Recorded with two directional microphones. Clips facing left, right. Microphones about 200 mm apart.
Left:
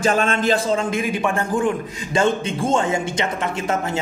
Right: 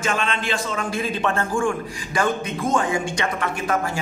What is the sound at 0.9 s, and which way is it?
A man's voice, 15° left (ahead or behind).